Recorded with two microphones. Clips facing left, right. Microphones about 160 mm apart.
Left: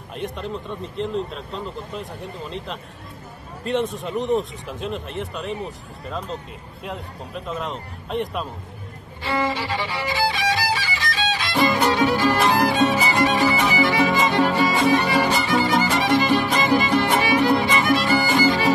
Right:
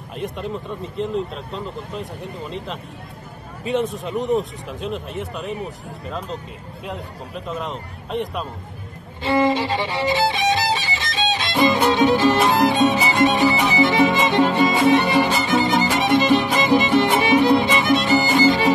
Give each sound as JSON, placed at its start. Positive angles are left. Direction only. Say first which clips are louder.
{"t": 0.1, "sound": "speech", "louder": "right 2 dB", "side_deg": 0}
{"t": 9.2, "sound": "music", "louder": "right 6 dB", "side_deg": -20}